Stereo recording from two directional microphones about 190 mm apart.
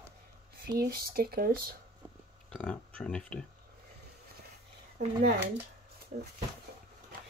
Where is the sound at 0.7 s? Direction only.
50° right (ahead or behind).